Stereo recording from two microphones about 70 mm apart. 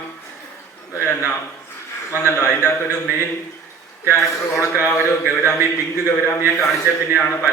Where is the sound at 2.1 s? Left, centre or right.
Left.